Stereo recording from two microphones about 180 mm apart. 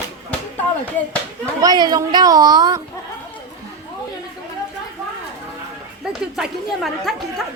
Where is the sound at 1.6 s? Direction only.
20° right (ahead or behind).